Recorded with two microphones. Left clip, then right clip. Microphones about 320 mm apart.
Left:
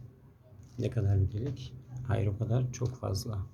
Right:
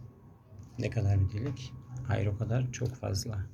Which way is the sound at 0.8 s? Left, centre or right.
Centre.